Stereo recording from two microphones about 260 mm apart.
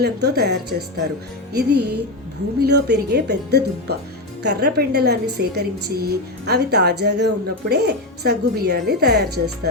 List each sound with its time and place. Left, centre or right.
0.0 s a woman's voice: right